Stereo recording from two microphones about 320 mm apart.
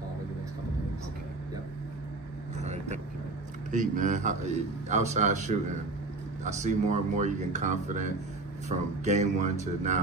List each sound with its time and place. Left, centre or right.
2.6 s vehicle: right
3.7 s a man's voice: right